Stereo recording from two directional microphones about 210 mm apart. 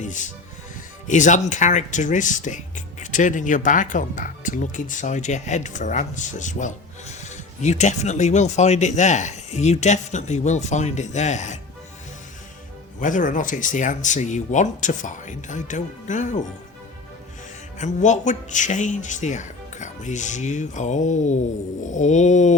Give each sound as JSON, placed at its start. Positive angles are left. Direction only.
{"t": 0.0, "sound": "music", "side_deg": 35}
{"t": 1.0, "sound": "speech", "side_deg": 35}
{"t": 13.0, "sound": "speech", "side_deg": 40}
{"t": 17.7, "sound": "speech", "side_deg": 35}